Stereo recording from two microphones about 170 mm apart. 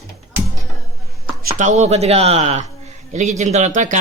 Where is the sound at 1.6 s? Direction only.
45° right (ahead or behind).